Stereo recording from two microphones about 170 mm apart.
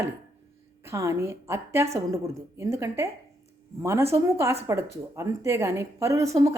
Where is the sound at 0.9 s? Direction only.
15° right (ahead or behind).